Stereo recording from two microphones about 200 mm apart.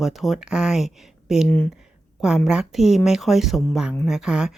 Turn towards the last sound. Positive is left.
turn(degrees=-5)  # may be behind; listen again after turning